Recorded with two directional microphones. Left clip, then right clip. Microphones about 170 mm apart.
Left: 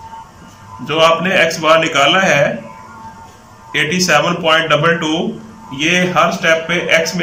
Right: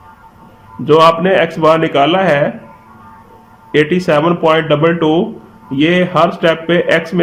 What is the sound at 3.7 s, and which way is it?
Speech, 35° right (ahead or behind).